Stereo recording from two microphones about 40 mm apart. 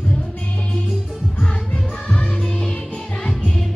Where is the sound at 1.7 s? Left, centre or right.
Left.